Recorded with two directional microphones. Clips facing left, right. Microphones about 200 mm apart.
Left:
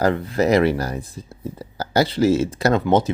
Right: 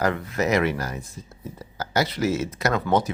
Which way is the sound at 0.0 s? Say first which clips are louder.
Left 5 dB; 30° left (ahead or behind).